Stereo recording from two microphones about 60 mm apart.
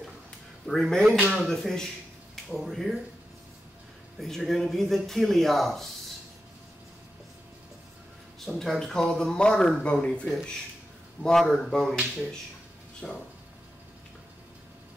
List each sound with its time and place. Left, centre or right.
0.7 s speech: centre
4.2 s speech: centre
8.4 s speech: centre
10.0 s speech: centre
11.2 s speech: centre
13.0 s speech: centre